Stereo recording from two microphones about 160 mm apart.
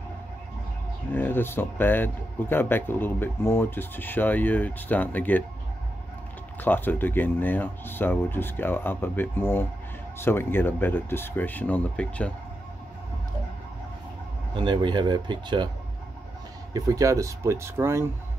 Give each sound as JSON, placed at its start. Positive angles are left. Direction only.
{"t": 1.1, "sound": "speech", "side_deg": 15}
{"t": 6.6, "sound": "speech", "side_deg": 10}
{"t": 14.5, "sound": "speech", "side_deg": -30}
{"t": 16.7, "sound": "speech", "side_deg": -20}